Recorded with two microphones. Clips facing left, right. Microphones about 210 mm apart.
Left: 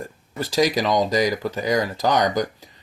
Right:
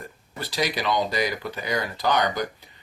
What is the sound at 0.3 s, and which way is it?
Speech, 40° left (ahead or behind).